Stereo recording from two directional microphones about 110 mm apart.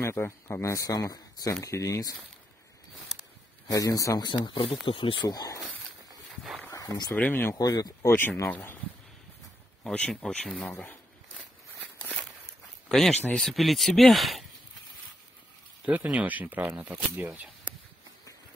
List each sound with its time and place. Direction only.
0.0 s a man's voice: 20° left (ahead or behind)
3.6 s a man's voice: 35° left (ahead or behind)
4.3 s speech: 45° left (ahead or behind)
5.3 s a man's voice: 35° left (ahead or behind)
6.7 s a sound: 35° left (ahead or behind)
7.1 s speech: 15° left (ahead or behind)
7.5 s a man's voice: 35° left (ahead or behind)
8.1 s speech: 20° left (ahead or behind)
9.8 s speech: 5° left (ahead or behind)
10.7 s a sound: 15° left (ahead or behind)
12.8 s a sound: 5° left (ahead or behind)
13.2 s speech: 5° left (ahead or behind)
15.8 s speech: 10° right (ahead or behind)